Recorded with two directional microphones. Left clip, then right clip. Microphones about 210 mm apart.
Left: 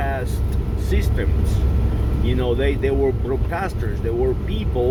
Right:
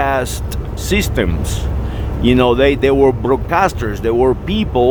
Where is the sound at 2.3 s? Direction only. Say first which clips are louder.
Right 10 dB; 35° right (ahead or behind).